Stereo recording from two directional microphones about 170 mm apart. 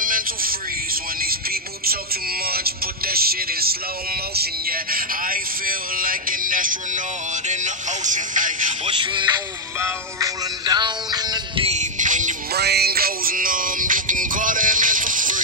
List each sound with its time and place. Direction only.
0.0 s music: 55° right (ahead or behind)
8.8 s speech: 30° right (ahead or behind)
9.8 s music: 15° right (ahead or behind); by 12.4 s 50° right (ahead or behind)
12.5 s music: 70° right (ahead or behind); by 15.4 s 50° right (ahead or behind)